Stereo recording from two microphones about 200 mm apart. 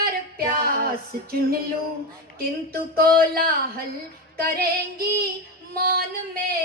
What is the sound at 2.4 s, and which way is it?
Female singing, 50° right (ahead or behind).